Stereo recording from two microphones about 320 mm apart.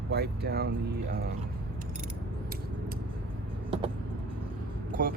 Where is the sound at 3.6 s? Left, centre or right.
Centre.